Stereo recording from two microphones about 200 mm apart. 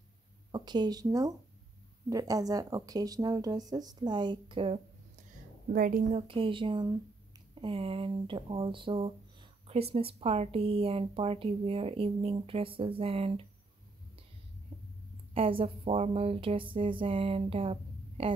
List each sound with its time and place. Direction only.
0.5 s speech: 20° right (ahead or behind)
5.7 s speech: 45° right (ahead or behind); by 13.5 s 30° right (ahead or behind)
15.3 s speech: 30° right (ahead or behind)